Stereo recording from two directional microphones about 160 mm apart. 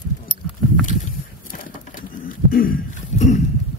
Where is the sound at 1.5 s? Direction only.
60° left (ahead or behind).